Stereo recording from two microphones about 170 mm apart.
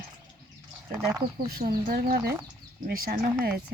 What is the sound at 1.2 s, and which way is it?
Speech, 65° right (ahead or behind).